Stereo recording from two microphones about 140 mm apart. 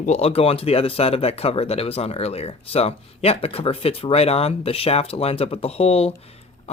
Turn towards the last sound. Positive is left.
turn(degrees=45)  # may be behind; listen again after turning